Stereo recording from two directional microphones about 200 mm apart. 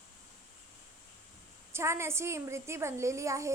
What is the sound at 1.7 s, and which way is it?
A child's voice, 15° right (ahead or behind).